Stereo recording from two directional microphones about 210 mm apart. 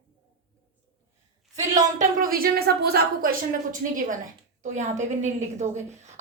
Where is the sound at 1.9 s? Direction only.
45° right (ahead or behind).